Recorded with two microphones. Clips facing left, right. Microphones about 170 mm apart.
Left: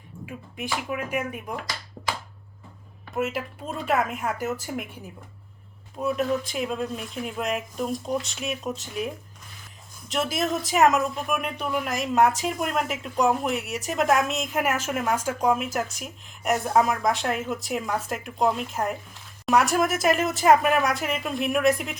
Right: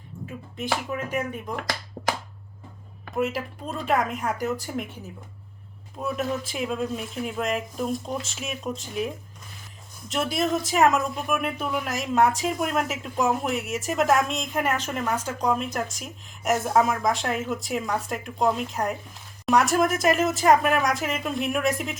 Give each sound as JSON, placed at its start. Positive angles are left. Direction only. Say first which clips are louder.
{"t": 0.3, "sound": "speech", "louder": "right 3 dB", "side_deg": 10}
{"t": 2.0, "sound": "a sound", "louder": "right 3 dB", "side_deg": -50}
{"t": 3.2, "sound": "speech", "louder": "right 1 dB", "side_deg": 0}
{"t": 6.0, "sound": "speech", "louder": "left 3 dB", "side_deg": 0}